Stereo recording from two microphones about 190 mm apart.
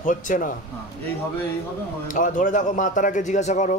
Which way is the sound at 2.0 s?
40° left (ahead or behind).